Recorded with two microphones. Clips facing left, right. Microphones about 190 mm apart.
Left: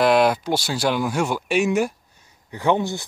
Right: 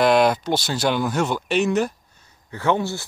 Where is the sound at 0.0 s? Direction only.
5° left (ahead or behind).